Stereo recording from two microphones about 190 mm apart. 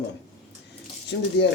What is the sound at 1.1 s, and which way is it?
Speech, 75° left (ahead or behind).